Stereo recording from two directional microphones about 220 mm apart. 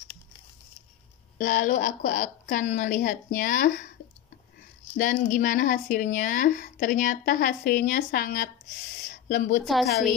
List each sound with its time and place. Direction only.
1.4 s speech: 40° left (ahead or behind)
4.9 s speech: 40° left (ahead or behind)
9.1 s a sound: 40° left (ahead or behind)